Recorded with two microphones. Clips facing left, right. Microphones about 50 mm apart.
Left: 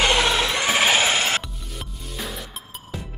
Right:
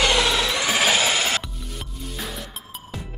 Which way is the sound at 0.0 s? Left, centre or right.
Left.